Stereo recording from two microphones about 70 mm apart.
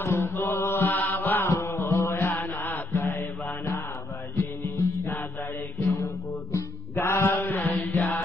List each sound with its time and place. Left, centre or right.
0.0 s mantra: left
0.7 s mantra: left
1.5 s mantra: left
4.4 s music: left
6.5 s music: left